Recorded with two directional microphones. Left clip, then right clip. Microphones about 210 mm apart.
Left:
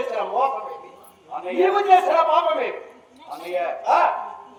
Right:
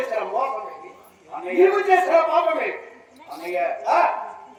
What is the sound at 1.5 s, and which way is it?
A man's voice, 20° left (ahead or behind).